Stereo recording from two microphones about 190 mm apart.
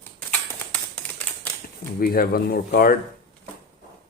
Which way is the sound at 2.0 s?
55° left (ahead or behind).